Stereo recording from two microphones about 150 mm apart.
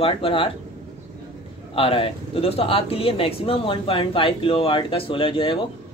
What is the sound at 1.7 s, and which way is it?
Speech, 35° left (ahead or behind).